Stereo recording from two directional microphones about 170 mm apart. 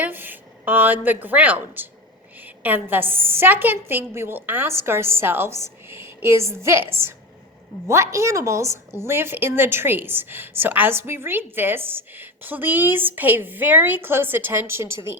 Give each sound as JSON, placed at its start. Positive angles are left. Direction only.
{"t": 0.0, "sound": "a woman's voice", "side_deg": -10}